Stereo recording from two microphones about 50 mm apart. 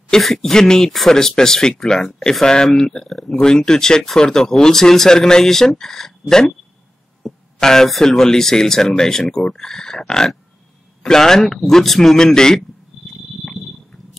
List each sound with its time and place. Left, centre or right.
0.2 s speech: centre
3.4 s speech: centre